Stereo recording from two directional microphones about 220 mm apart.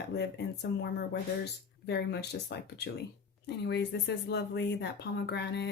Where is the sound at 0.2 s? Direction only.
50° left (ahead or behind).